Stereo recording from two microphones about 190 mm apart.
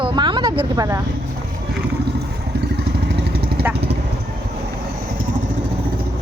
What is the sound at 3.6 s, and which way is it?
Vehicle, 10° right (ahead or behind).